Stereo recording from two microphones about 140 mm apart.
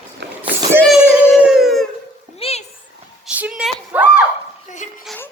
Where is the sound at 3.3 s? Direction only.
10° right (ahead or behind).